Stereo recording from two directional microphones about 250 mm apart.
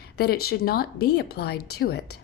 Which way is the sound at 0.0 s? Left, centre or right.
Left.